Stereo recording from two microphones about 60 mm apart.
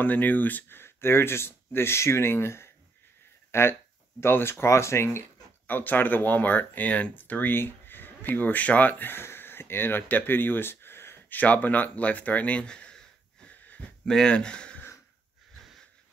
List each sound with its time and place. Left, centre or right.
0.0 s speech: left
4.6 s speech: left
5.7 s speech: left
11.3 s speech: left